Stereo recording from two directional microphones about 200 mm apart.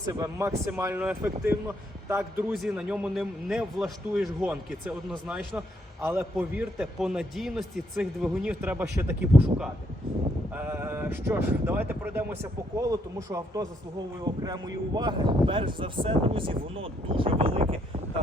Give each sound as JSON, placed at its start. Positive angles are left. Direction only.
{"t": 0.1, "sound": "speech", "side_deg": -15}